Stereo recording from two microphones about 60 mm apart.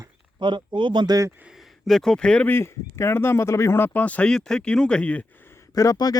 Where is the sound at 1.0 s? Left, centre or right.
Right.